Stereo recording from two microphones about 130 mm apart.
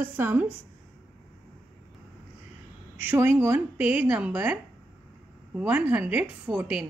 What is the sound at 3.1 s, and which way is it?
Speech, 20° right (ahead or behind).